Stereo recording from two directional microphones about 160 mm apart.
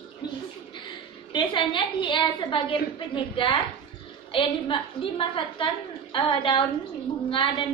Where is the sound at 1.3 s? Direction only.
30° left (ahead or behind).